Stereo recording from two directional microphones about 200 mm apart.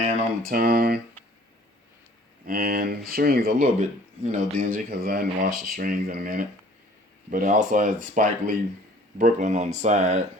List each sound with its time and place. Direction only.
0.4 s speech: 45° right (ahead or behind)
2.5 s speech: 45° right (ahead or behind)